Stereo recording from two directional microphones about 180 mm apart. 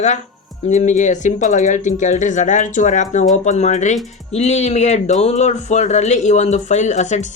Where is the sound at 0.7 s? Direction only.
45° left (ahead or behind).